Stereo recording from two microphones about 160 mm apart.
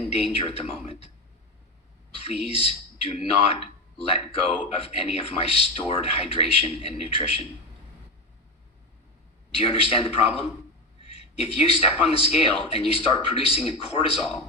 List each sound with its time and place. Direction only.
0.1 s speech: 35° left (ahead or behind)
2.6 s speech: 40° left (ahead or behind)
9.6 s speech: 35° left (ahead or behind)